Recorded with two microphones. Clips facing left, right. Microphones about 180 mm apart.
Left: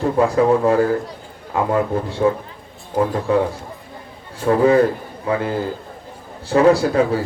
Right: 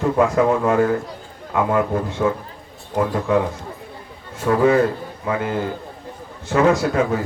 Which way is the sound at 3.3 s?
35° left (ahead or behind).